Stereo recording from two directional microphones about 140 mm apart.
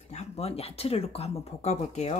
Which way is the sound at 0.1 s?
50° left (ahead or behind).